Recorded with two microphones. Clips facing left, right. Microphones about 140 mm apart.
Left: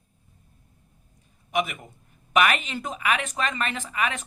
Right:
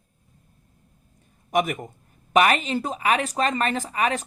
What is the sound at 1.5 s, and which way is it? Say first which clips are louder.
A man's voice: right 4 dB; 45° right (ahead or behind).